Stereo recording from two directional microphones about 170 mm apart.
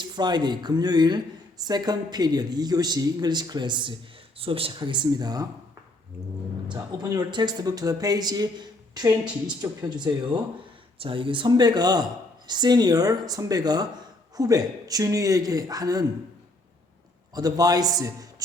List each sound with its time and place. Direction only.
0.0 s speech: 25° right (ahead or behind)
6.7 s speech: 25° right (ahead or behind)
17.3 s speech: 20° right (ahead or behind)